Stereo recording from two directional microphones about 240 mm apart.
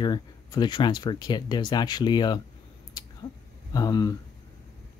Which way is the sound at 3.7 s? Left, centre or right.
Centre.